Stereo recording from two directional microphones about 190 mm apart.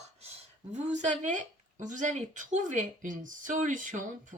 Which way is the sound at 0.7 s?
40° right (ahead or behind).